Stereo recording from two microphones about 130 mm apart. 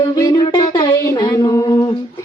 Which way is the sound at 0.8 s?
30° left (ahead or behind).